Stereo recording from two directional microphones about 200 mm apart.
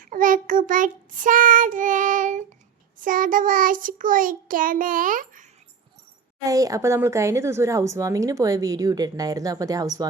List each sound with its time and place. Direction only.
0.0 s child singing: 45° right (ahead or behind)
6.4 s speech: 15° right (ahead or behind)